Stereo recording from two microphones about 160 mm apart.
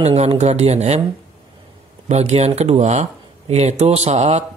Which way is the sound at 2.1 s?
45° right (ahead or behind).